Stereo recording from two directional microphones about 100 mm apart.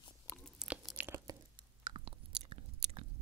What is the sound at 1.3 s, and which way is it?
Chewing, 40° right (ahead or behind).